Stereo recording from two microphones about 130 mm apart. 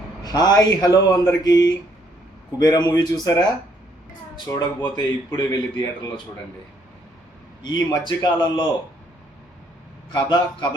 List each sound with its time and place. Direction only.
0.2 s speech: 30° left (ahead or behind)
4.4 s speech: 25° left (ahead or behind)
7.6 s a man's voice: 35° left (ahead or behind)
10.1 s a man's voice: 35° left (ahead or behind)